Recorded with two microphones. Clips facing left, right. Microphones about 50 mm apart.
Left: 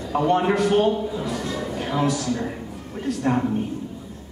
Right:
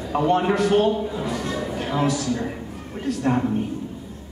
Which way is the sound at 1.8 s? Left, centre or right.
Centre.